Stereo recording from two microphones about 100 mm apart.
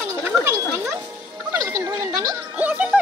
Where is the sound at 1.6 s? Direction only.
30° right (ahead or behind).